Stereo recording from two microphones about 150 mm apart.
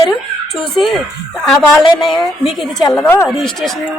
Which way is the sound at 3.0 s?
15° left (ahead or behind).